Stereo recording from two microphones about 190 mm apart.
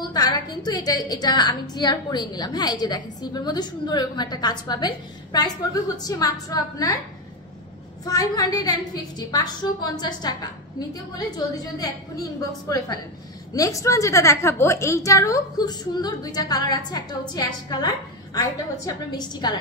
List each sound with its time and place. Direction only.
0.1 s a woman's voice: 20° left (ahead or behind)
8.0 s a woman's voice: 20° left (ahead or behind)